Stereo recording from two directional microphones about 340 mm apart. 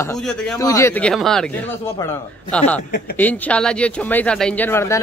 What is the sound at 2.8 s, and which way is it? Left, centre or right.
Speech, left.